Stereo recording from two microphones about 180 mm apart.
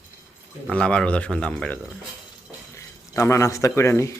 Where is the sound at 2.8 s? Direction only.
15° left (ahead or behind).